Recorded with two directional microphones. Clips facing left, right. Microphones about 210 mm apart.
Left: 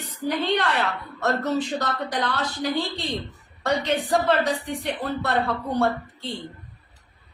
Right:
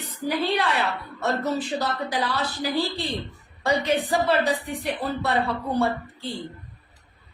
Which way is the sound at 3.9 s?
5° right (ahead or behind).